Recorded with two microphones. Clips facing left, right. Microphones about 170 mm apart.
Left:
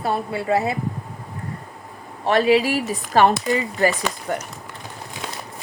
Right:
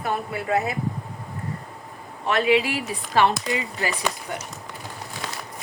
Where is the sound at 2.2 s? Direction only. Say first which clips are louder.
Left 4 dB; 35° left (ahead or behind).